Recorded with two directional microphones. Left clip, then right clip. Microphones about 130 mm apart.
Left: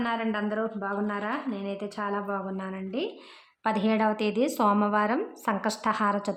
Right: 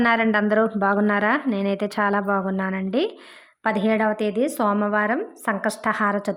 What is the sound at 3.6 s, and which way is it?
A woman's voice, 25° right (ahead or behind).